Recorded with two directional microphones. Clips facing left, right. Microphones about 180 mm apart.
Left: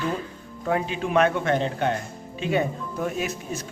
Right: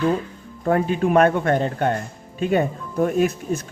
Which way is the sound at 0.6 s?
50° right (ahead or behind).